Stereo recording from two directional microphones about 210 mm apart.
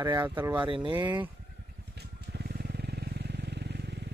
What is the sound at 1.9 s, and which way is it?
Vehicle, 50° right (ahead or behind).